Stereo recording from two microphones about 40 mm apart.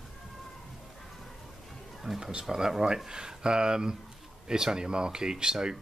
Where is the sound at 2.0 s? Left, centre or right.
Centre.